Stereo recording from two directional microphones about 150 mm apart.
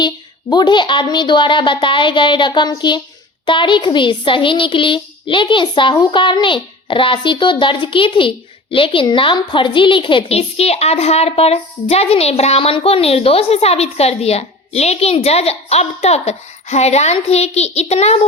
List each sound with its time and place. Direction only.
0.5 s a child's voice: 30° left (ahead or behind)